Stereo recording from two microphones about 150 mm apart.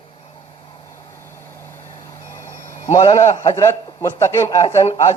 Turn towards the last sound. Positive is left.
turn(degrees=35)  # may be behind; listen again after turning